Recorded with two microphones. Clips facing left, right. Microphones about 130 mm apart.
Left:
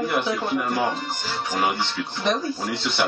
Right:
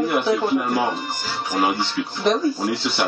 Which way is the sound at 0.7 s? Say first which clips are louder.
Right 2 dB; 5° right (ahead or behind).